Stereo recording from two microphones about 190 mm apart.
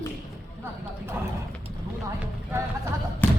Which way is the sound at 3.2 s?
10° left (ahead or behind).